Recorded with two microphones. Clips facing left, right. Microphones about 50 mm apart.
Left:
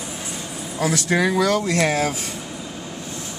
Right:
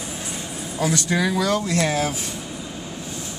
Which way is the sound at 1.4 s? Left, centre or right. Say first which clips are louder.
Left 2 dB; left.